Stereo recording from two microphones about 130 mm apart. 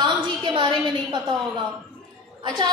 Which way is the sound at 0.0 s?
35° right (ahead or behind).